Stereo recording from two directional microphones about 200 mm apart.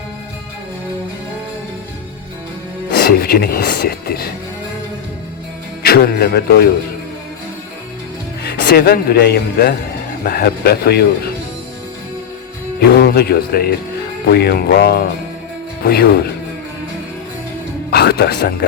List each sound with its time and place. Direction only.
2.9 s speech: 50° left (ahead or behind)
5.8 s speech: 50° left (ahead or behind)
8.4 s speech: 50° left (ahead or behind)
12.9 s speech: 55° left (ahead or behind)
17.9 s speech: 50° left (ahead or behind)